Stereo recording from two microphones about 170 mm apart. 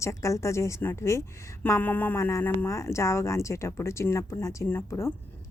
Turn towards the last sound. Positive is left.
turn(degrees=15)  # may be behind; listen again after turning